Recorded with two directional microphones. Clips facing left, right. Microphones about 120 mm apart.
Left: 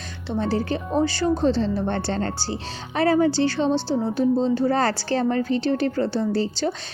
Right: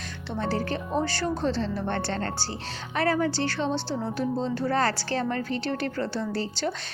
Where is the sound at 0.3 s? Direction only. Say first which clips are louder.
Left 5 dB; 20° left (ahead or behind).